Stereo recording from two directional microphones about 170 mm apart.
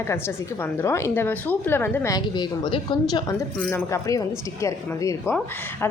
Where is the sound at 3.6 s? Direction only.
10° left (ahead or behind).